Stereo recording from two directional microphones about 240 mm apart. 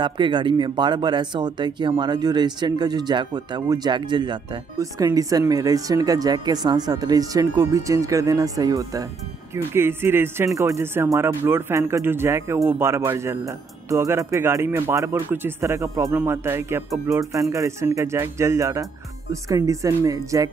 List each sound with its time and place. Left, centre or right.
0.0 s speech: centre